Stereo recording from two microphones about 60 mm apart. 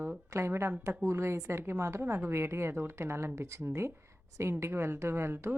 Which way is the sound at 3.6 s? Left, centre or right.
Right.